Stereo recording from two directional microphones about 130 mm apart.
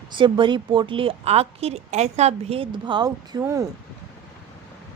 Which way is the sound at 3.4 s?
20° right (ahead or behind).